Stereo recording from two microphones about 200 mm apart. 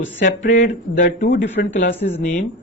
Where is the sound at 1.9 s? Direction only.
30° left (ahead or behind).